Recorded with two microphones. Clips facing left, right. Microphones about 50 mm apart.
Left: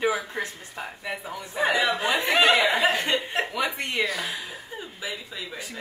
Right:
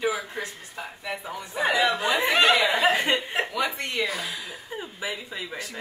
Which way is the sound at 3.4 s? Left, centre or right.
Centre.